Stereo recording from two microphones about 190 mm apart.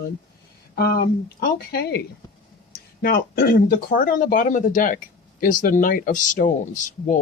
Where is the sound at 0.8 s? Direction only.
50° left (ahead or behind).